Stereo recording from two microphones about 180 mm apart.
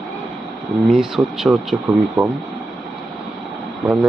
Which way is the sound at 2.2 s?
15° right (ahead or behind).